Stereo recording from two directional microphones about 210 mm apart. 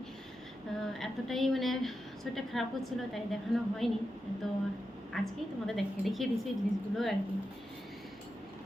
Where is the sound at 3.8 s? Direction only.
Centre (ahead or behind).